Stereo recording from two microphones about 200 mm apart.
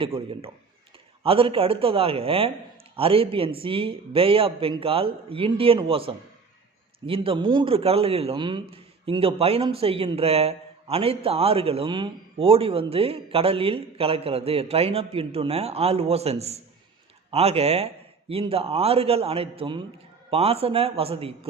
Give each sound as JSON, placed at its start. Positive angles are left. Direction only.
{"t": 0.0, "sound": "a man's voice", "side_deg": -25}